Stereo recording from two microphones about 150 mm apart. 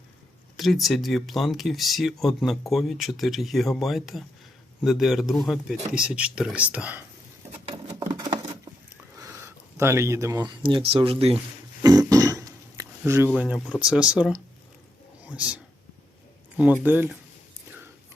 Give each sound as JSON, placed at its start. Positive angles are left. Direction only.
{"t": 0.5, "sound": "speech", "side_deg": 0}
{"t": 7.7, "sound": "patter", "side_deg": -30}
{"t": 9.1, "sound": "speech", "side_deg": -20}
{"t": 11.8, "sound": "a sound", "side_deg": -25}
{"t": 15.3, "sound": "speech", "side_deg": -10}
{"t": 16.8, "sound": "speech", "side_deg": -10}